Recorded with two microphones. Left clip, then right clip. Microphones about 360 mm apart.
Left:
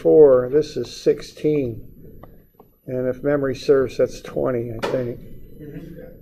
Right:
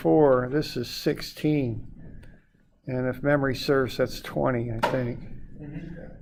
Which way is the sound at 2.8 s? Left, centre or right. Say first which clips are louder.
Left 4 dB; right.